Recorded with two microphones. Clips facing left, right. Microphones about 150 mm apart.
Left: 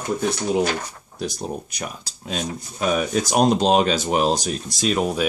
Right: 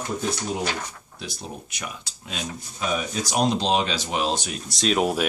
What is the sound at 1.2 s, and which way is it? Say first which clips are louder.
Speech: left 8 dB; 40° left (ahead or behind).